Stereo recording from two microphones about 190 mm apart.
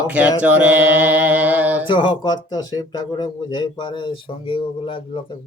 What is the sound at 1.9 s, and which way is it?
Speech, 25° left (ahead or behind).